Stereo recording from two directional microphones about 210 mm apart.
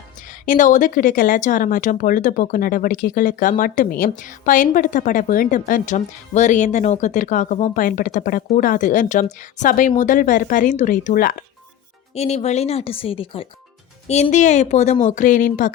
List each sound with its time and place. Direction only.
0.3 s speech: 40° left (ahead or behind)
12.1 s speech: 30° left (ahead or behind)